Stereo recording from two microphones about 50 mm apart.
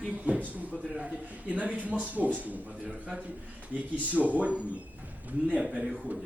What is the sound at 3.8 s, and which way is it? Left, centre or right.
Speech, right.